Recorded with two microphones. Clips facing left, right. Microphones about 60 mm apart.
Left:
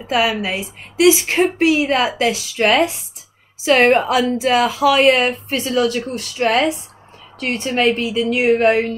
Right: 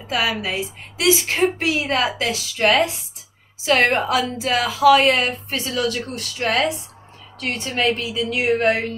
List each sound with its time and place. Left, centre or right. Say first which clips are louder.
0.1 s a woman's voice: left 4 dB; left
2.5 s a woman's voice: even; left